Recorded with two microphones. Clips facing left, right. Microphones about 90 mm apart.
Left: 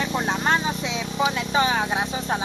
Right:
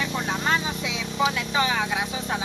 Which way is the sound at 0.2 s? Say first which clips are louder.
Left 3 dB; 35° left (ahead or behind).